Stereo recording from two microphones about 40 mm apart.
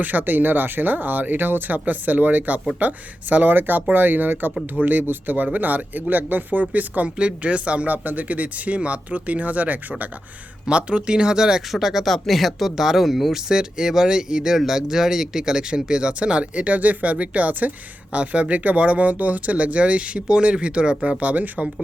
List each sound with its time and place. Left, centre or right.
0.0 s speech: right
7.2 s speech: right
7.9 s speech: right
10.7 s speech: right
11.7 s speech: centre
13.5 s speech: centre; by 21.7 s right